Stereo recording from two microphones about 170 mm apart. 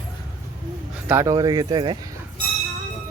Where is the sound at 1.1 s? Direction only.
15° right (ahead or behind).